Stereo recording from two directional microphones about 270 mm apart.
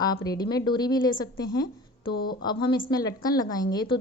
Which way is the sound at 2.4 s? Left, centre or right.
Centre.